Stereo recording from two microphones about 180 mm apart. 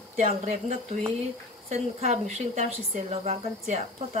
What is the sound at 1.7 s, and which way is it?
Speech, 35° right (ahead or behind).